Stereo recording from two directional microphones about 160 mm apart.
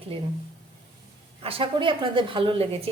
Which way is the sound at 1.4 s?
35° right (ahead or behind).